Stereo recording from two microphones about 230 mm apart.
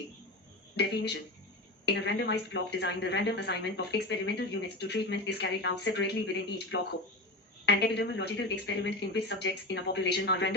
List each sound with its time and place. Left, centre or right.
0.8 s a woman's voice: left